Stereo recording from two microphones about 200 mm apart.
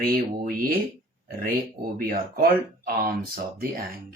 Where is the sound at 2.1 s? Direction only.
45° right (ahead or behind).